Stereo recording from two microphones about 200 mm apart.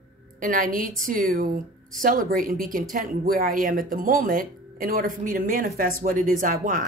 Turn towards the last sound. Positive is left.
turn(degrees=-40)  # may be behind; listen again after turning